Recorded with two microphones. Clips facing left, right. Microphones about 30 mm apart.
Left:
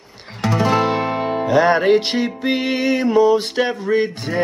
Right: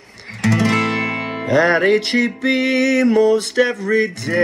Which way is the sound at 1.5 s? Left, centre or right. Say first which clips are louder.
Even; left.